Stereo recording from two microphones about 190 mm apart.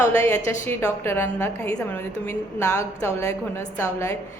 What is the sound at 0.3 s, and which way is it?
A woman's voice, 15° left (ahead or behind).